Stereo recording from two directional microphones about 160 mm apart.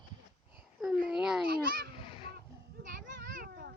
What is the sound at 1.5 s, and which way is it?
Speech, 80° right.